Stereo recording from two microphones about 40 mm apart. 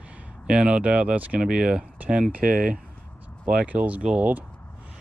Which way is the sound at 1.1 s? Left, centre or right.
Right.